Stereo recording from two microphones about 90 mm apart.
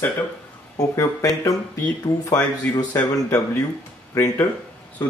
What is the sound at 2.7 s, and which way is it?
Speech, 45° left (ahead or behind).